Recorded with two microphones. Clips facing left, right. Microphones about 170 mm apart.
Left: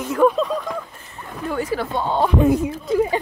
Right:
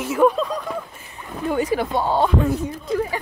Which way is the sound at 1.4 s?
20° right (ahead or behind).